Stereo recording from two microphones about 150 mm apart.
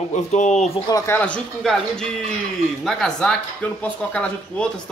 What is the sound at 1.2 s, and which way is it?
A woman's voice, 10° left (ahead or behind).